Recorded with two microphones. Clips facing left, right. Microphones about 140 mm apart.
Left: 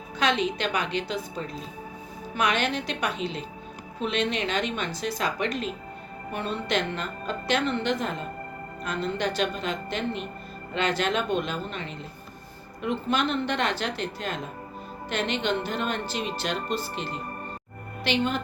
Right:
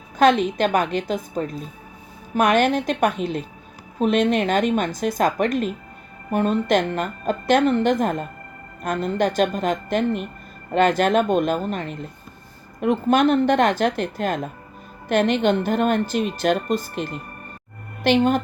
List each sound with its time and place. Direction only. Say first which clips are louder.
0.2 s speech: right 9 dB; 50° right (ahead or behind)